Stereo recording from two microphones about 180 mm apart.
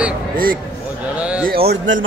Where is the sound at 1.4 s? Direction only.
60° right (ahead or behind); by 2.0 s 75° right (ahead or behind).